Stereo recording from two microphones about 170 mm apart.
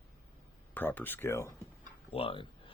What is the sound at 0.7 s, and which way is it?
Speech, 10° left (ahead or behind).